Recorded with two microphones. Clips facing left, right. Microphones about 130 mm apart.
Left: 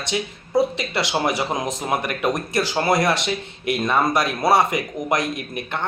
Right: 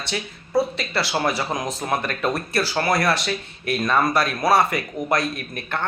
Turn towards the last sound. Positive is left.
turn(degrees=20)  # may be behind; listen again after turning